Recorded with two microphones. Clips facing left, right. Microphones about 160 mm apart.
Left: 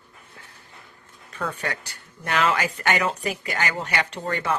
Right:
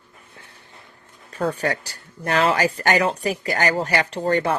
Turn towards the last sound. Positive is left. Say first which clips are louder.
# right 6 dB
turn(degrees=-35)  # may be behind; listen again after turning